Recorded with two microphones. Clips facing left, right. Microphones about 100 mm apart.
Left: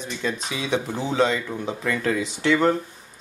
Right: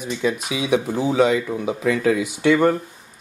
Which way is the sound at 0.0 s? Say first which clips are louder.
Right 5 dB; 10° right (ahead or behind).